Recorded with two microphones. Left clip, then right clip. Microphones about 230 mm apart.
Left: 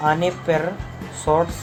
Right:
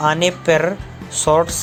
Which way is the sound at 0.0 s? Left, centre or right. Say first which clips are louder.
Right 3 dB; right.